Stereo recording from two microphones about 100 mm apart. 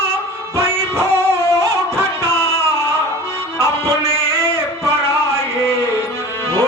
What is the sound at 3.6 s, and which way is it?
Music, 25° right (ahead or behind).